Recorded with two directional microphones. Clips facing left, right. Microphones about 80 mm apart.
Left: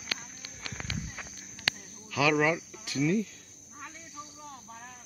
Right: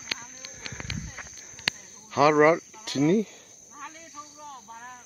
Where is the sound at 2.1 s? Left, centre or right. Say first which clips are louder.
Right 7 dB; right.